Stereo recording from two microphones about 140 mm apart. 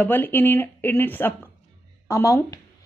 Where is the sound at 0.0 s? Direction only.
15° left (ahead or behind).